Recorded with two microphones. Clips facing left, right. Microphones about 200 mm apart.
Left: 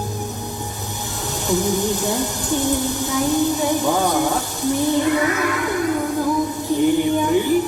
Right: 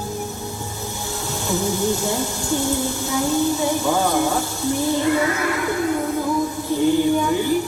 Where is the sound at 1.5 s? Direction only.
15° left (ahead or behind).